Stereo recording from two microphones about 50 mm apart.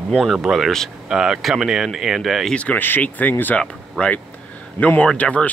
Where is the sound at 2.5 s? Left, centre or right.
Left.